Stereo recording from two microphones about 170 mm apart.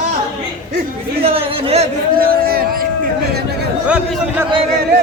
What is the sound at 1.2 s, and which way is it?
Speech, 35° right (ahead or behind).